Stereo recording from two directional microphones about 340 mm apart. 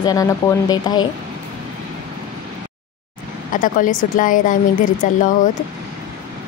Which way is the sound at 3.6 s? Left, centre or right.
Left.